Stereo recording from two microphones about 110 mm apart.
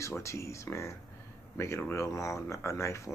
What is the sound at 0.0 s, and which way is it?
Speech, 25° left (ahead or behind).